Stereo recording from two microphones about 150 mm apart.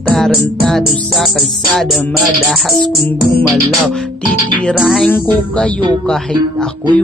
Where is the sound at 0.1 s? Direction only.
5° left (ahead or behind).